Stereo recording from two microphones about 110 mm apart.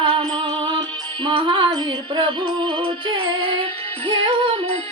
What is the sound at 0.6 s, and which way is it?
Music, 45° right (ahead or behind).